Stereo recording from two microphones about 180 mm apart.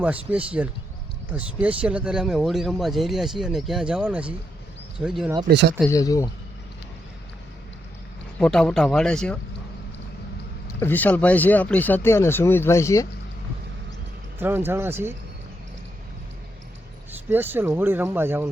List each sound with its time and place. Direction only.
0.0 s speech: 10° right (ahead or behind)
5.5 s speech: 65° right (ahead or behind)
5.9 s speech: 20° left (ahead or behind)
8.4 s speech: 5° left (ahead or behind)
10.8 s speech: 10° left (ahead or behind)
14.3 s speech: 10° right (ahead or behind)
17.1 s speech: 10° right (ahead or behind)